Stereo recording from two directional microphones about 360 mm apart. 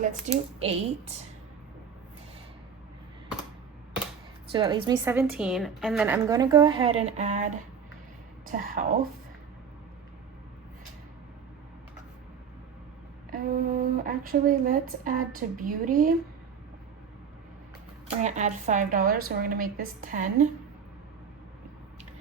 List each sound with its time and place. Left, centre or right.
0.0 s speech: centre
4.5 s a woman's voice: centre
13.3 s speech: right
18.2 s speech: centre